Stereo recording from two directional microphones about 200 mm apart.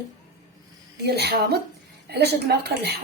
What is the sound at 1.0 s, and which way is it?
A woman's voice, 55° right (ahead or behind).